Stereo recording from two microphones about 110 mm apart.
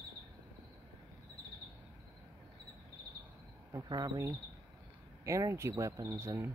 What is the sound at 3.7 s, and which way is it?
Speech, 35° right (ahead or behind).